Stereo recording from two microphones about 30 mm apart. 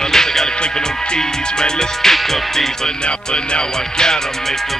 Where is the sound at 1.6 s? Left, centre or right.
Centre.